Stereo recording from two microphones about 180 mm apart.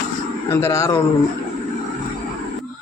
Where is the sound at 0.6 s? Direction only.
15° left (ahead or behind).